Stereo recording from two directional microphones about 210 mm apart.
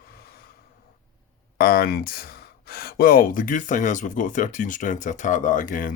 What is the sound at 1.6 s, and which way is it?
Speech, 45° left (ahead or behind).